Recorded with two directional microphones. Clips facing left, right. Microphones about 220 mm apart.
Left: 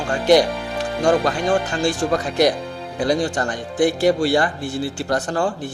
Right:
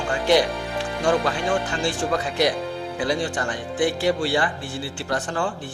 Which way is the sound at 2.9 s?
40° left (ahead or behind).